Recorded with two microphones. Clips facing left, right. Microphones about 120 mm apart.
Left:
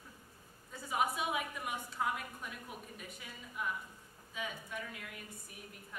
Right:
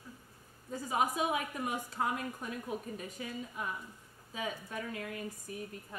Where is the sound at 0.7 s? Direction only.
40° right (ahead or behind).